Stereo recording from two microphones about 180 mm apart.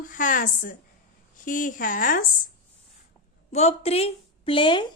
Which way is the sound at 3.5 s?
35° left (ahead or behind).